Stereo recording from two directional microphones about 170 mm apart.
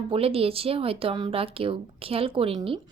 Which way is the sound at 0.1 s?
35° right (ahead or behind).